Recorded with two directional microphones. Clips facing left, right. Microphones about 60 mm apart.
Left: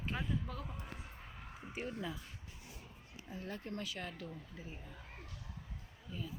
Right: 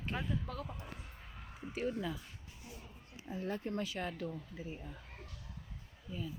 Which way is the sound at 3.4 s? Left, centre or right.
Right.